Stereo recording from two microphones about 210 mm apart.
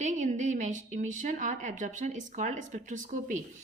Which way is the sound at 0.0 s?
35° right (ahead or behind).